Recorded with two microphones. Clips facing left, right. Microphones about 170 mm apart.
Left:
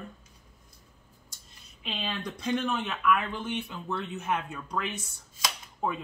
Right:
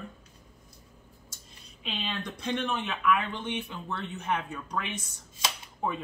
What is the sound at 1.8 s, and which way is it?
Speech, 5° left (ahead or behind).